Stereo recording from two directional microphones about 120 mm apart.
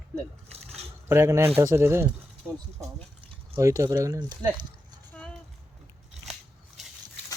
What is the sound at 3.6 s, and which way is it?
Speech, 25° right (ahead or behind).